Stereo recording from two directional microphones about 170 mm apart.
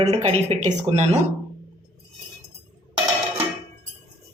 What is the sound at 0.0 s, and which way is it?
Speech, 40° right (ahead or behind).